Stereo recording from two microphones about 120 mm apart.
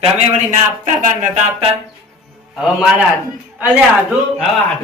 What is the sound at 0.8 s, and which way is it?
Speech, 90° right.